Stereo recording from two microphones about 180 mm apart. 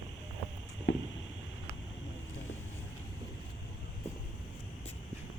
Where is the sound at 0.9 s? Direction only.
90° left.